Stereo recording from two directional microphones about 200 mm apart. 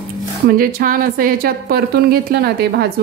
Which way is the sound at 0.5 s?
45° right (ahead or behind).